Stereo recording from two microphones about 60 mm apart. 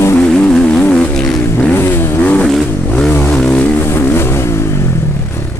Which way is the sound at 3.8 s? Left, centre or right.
Left.